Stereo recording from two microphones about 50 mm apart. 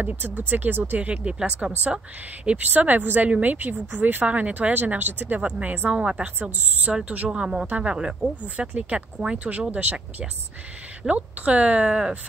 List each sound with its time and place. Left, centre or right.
0.0 s speech: right
1.0 s a woman's voice: right
2.4 s speech: right
7.2 s a woman's voice: centre
9.5 s a woman's voice: right
11.1 s a woman's voice: right